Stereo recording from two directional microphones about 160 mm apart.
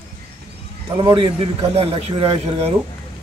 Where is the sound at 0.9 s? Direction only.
30° right (ahead or behind).